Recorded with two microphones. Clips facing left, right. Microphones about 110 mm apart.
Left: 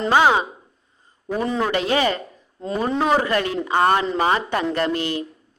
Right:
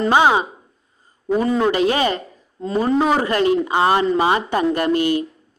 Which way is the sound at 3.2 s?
20° right (ahead or behind).